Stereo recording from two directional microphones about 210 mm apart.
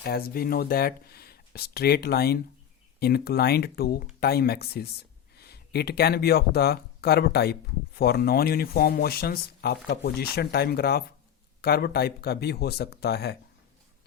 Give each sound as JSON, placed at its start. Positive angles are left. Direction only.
{"t": 0.0, "sound": "speech", "side_deg": 45}